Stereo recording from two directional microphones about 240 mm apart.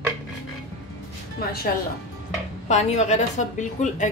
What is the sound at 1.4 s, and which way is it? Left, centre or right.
Speech, left.